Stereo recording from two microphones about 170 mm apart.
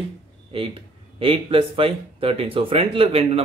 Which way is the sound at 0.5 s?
35° right (ahead or behind).